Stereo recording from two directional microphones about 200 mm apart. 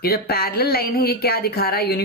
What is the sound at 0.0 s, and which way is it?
A woman's voice, 50° left (ahead or behind).